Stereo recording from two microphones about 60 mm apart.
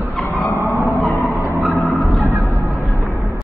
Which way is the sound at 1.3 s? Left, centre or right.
Centre.